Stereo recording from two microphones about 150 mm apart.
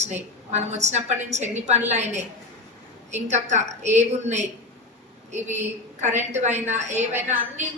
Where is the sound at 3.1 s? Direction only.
50° right (ahead or behind).